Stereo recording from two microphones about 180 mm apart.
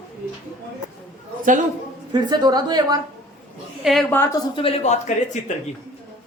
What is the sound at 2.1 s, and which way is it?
Speech, 25° right (ahead or behind).